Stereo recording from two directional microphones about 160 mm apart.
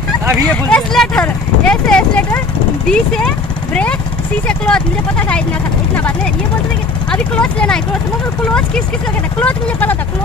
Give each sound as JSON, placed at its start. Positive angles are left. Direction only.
{"t": 0.7, "sound": "a sound", "side_deg": 5}
{"t": 2.9, "sound": "speech", "side_deg": 5}
{"t": 7.1, "sound": "speech", "side_deg": 5}
{"t": 9.4, "sound": "speech", "side_deg": 10}